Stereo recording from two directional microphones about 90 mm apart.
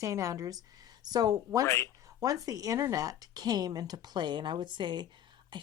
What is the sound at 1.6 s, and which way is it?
Speech, 30° left (ahead or behind).